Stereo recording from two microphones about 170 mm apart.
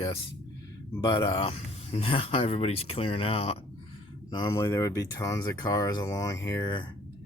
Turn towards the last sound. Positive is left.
turn(degrees=25)  # may be behind; listen again after turning